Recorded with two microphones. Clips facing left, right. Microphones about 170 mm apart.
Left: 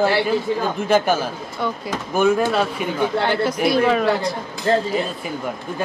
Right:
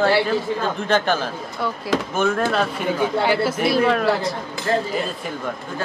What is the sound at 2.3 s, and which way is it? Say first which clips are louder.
Speech: left 3 dB; 5° left (ahead or behind).